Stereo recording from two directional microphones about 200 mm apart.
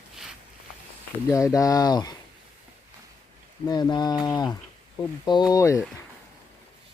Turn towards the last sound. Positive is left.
turn(degrees=15)  # may be behind; listen again after turning